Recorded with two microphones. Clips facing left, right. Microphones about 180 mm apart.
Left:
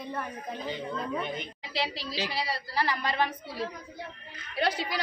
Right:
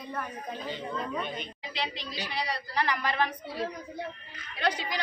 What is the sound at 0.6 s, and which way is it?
Speech, 15° left (ahead or behind).